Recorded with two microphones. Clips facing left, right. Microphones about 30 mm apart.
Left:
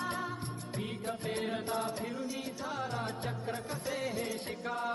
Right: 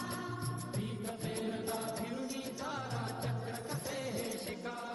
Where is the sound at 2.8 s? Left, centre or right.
Left.